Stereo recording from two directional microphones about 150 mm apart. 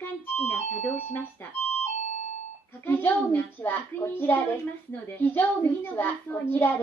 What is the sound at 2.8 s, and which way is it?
A woman's voice, 15° left (ahead or behind).